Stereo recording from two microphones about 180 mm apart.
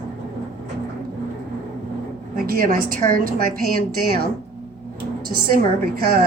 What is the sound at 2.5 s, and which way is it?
A woman's voice, 55° right (ahead or behind).